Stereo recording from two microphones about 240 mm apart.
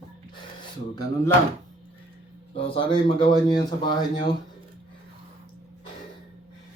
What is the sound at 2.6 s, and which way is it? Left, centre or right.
Speech, left.